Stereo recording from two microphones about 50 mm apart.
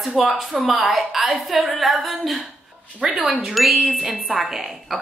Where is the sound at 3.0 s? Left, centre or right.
Right.